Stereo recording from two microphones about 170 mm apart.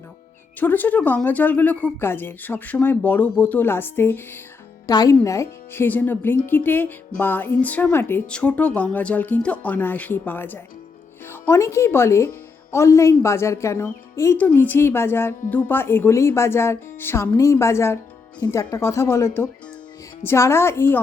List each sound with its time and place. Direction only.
0.6 s a woman's voice: 10° left (ahead or behind)